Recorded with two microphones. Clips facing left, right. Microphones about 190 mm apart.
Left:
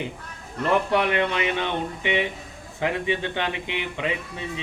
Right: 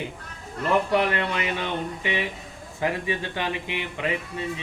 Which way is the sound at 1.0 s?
20° left (ahead or behind).